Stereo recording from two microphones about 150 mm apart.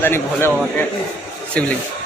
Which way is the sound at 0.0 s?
15° left (ahead or behind).